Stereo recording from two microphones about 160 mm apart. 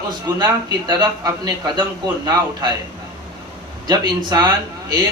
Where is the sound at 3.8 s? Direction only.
25° right (ahead or behind).